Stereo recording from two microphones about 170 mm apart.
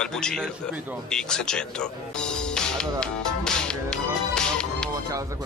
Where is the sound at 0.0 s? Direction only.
5° left (ahead or behind).